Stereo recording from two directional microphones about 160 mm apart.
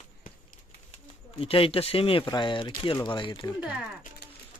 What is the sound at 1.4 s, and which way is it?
Speech, 35° left (ahead or behind).